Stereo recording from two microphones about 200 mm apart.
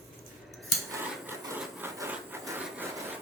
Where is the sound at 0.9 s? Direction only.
15° right (ahead or behind).